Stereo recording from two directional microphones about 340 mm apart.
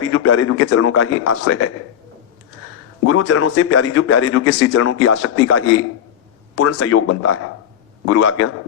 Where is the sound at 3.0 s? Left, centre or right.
Left.